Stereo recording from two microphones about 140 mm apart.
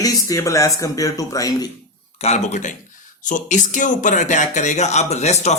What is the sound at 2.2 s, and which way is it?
A man's voice, 50° left (ahead or behind).